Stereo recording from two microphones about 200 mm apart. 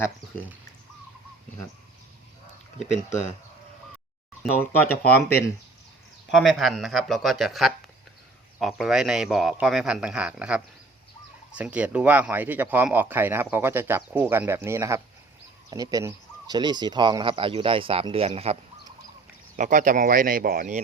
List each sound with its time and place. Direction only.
3.1 s speech: 35° left (ahead or behind)
4.6 s speech: 10° left (ahead or behind)
6.3 s speech: centre (ahead or behind); by 18.5 s 30° right (ahead or behind)
19.5 s speech: 40° right (ahead or behind)